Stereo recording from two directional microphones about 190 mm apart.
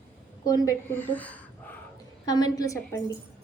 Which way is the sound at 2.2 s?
20° left (ahead or behind).